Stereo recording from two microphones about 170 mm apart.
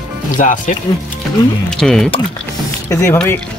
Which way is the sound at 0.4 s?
50° left (ahead or behind).